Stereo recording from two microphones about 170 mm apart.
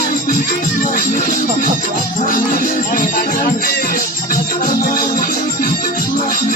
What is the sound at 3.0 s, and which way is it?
Music, 55° left (ahead or behind).